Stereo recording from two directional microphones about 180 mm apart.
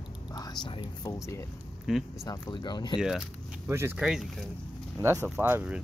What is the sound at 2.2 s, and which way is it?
Speech, 20° left (ahead or behind).